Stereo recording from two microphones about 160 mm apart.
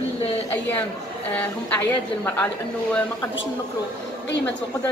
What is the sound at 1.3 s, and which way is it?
Speech, 10° left (ahead or behind).